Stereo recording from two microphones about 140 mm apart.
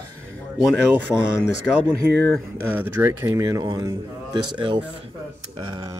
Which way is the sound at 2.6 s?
15° right (ahead or behind).